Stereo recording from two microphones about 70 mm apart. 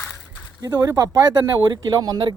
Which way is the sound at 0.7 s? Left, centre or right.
Right.